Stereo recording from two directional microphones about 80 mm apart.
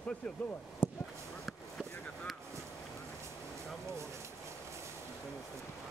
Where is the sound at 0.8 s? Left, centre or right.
Left.